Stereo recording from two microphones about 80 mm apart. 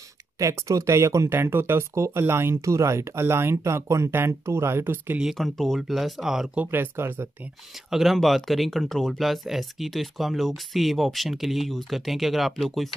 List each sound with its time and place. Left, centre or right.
0.4 s speech: right
5.2 s speech: centre
6.5 s speech: right
7.9 s speech: centre